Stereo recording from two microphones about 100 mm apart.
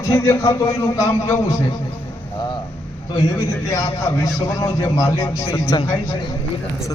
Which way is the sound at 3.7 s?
35° left (ahead or behind).